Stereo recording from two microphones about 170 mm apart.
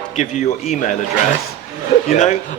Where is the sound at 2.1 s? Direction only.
40° left (ahead or behind).